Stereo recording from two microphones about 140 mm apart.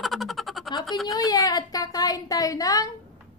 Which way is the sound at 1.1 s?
25° left (ahead or behind).